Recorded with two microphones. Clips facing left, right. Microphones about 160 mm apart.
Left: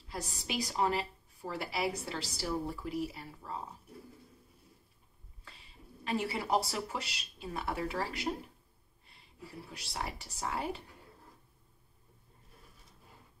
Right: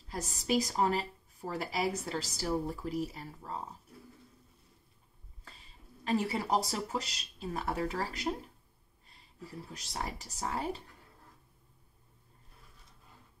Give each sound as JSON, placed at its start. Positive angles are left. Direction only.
{"t": 0.1, "sound": "a woman's voice", "side_deg": -40}
{"t": 6.0, "sound": "a woman's voice", "side_deg": -40}
{"t": 9.8, "sound": "a woman's voice", "side_deg": -40}